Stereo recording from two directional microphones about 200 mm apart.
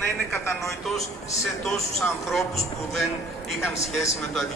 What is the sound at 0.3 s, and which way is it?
Speech, 15° left (ahead or behind).